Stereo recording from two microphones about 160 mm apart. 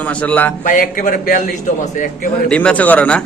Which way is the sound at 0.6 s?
60° left (ahead or behind).